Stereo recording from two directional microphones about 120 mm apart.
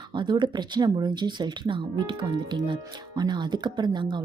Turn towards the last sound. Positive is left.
turn(degrees=-40)  # may be behind; listen again after turning